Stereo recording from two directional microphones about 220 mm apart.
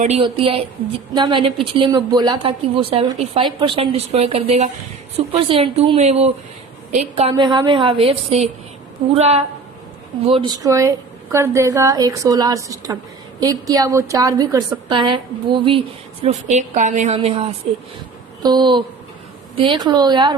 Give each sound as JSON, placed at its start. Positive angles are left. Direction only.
{"t": 0.2, "sound": "a woman's voice", "side_deg": -25}